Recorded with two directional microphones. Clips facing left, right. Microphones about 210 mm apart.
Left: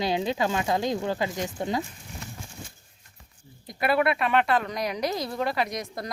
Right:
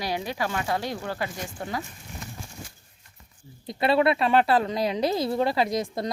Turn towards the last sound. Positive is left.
turn(degrees=-25)  # may be behind; listen again after turning